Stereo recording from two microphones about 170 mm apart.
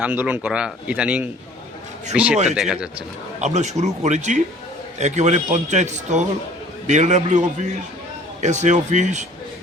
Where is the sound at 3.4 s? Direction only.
40° right (ahead or behind).